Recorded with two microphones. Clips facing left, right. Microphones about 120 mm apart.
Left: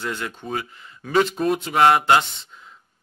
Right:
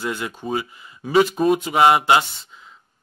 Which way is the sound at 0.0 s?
10° right (ahead or behind).